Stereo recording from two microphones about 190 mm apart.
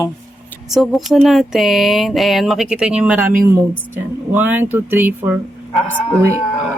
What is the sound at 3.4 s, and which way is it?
Speech, 15° right (ahead or behind).